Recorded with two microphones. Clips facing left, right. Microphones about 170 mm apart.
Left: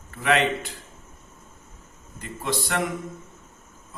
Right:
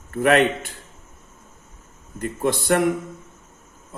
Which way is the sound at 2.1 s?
55° right (ahead or behind).